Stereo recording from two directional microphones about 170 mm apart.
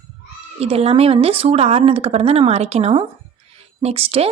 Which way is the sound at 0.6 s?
35° right (ahead or behind).